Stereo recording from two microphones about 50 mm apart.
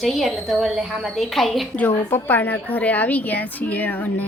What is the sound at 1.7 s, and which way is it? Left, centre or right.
A woman's voice, left.